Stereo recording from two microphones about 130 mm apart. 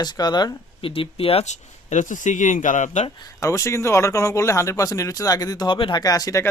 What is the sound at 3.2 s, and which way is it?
Speech, 25° left (ahead or behind).